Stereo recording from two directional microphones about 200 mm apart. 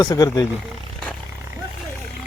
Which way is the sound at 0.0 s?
20° left (ahead or behind).